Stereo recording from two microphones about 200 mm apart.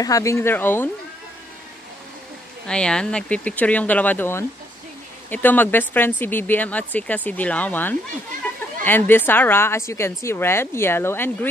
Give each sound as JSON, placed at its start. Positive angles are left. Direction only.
{"t": 0.0, "sound": "speech", "side_deg": 15}
{"t": 2.6, "sound": "speech", "side_deg": 5}